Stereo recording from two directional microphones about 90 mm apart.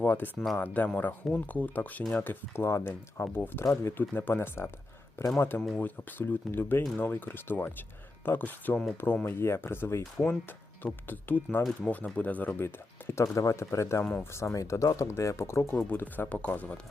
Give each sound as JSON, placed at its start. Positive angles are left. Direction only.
{"t": 0.0, "sound": "speech", "side_deg": 20}